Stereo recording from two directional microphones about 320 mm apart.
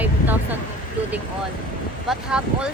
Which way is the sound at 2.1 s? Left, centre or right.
Centre.